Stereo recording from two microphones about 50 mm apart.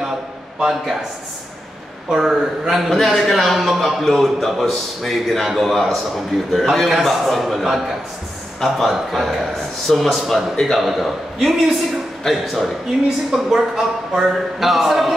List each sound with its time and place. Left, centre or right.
0.6 s speech: centre
2.1 s a man's voice: centre
8.6 s a man's voice: centre
10.8 s a man's voice: centre
13.3 s a man's voice: centre